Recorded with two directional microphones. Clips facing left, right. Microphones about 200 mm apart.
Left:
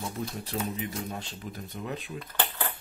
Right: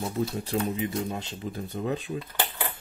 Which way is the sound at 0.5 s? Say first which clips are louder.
Right 5 dB; 30° right (ahead or behind).